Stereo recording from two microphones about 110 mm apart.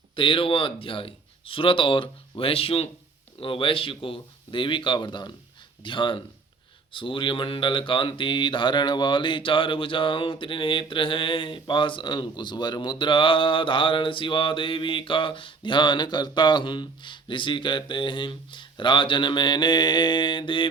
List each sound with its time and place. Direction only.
0.2 s speech: 50° left (ahead or behind)